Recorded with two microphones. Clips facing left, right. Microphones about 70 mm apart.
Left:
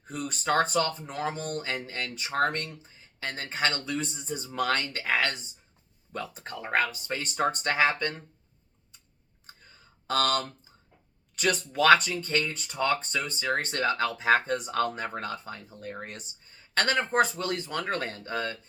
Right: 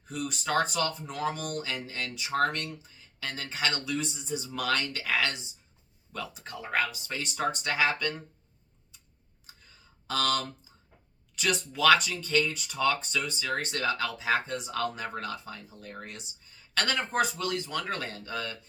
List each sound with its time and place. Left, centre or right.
0.1 s speech: left
9.5 s clicking: left
10.1 s speech: left